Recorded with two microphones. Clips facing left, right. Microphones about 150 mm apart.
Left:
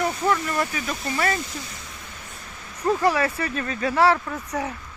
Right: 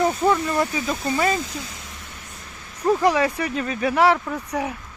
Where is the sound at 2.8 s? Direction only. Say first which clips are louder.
Right 2 dB; 15° right (ahead or behind).